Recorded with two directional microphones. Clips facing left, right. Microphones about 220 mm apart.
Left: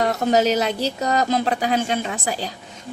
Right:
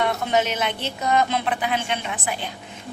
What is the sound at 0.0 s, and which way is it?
A woman's voice, 40° left (ahead or behind).